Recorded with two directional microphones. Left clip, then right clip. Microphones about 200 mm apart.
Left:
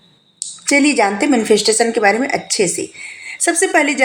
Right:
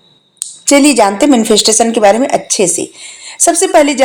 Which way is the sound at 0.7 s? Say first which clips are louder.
Right 6 dB; 35° right (ahead or behind).